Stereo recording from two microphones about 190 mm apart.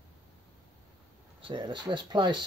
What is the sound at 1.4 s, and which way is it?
Speech, 25° right (ahead or behind).